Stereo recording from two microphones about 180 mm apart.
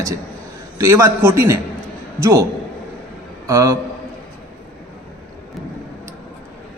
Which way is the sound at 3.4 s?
15° right (ahead or behind).